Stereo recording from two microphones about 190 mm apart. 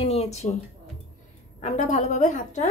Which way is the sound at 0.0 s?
35° left (ahead or behind).